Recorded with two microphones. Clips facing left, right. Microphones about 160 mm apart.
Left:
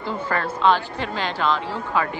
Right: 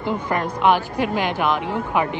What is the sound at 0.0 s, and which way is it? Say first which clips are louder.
Speech: right 2 dB; 15° right (ahead or behind).